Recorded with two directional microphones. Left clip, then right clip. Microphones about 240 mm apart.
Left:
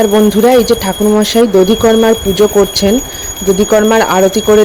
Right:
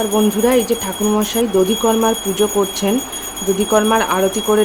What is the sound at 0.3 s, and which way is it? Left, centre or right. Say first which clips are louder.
Speech: left 7 dB; left.